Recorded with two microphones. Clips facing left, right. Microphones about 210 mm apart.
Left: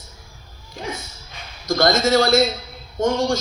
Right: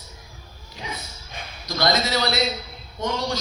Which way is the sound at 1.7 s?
45° left (ahead or behind).